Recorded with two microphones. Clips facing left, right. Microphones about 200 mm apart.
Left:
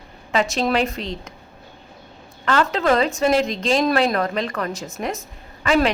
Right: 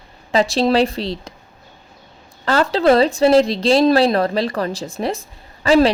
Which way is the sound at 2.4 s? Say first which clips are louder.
Right 4 dB; 35° right (ahead or behind).